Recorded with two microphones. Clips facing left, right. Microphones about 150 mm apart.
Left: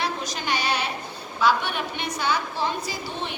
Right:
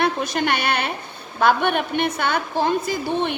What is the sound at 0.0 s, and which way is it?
A woman's voice, 55° right (ahead or behind).